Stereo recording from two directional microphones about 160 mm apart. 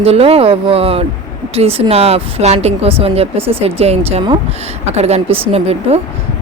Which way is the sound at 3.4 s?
15° right (ahead or behind).